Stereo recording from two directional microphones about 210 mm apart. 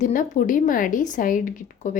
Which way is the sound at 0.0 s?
40° left (ahead or behind).